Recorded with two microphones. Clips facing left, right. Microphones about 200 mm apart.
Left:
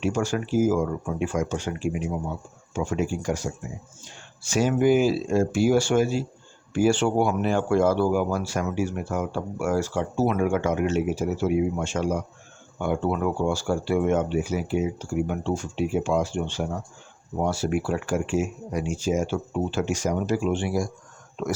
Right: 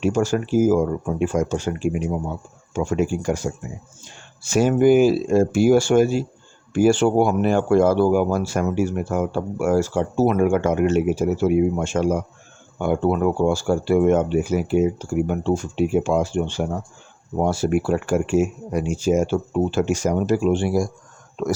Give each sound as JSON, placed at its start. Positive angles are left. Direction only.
{"t": 0.0, "sound": "speech", "side_deg": -45}